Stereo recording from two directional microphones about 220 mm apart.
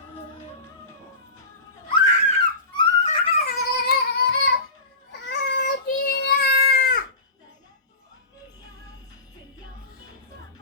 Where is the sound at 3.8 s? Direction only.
45° left (ahead or behind).